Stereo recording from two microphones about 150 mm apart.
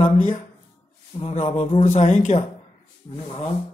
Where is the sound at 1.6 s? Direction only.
50° left (ahead or behind).